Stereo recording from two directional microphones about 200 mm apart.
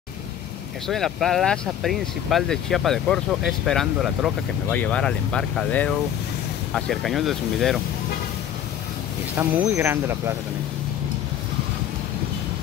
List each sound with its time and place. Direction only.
0.8 s speech: centre (ahead or behind)
9.4 s speech: 10° right (ahead or behind)